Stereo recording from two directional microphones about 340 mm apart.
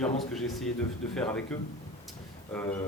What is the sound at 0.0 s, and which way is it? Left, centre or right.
A man's voice, centre.